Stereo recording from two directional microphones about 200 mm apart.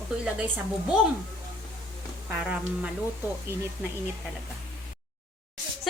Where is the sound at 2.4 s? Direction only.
5° right (ahead or behind).